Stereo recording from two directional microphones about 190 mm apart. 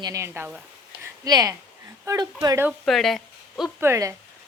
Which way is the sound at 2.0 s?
15° right (ahead or behind).